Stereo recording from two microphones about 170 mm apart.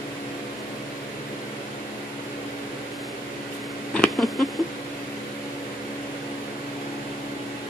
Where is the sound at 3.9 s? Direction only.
5° left (ahead or behind).